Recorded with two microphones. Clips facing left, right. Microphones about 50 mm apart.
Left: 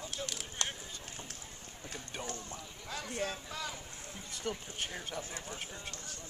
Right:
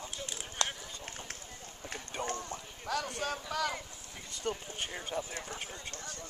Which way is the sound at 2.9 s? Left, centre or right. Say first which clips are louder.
Right 4 dB; right.